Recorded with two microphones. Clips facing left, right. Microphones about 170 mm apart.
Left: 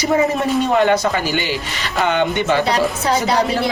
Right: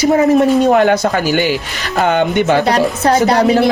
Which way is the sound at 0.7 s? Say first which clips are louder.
Right 3 dB; 45° right (ahead or behind).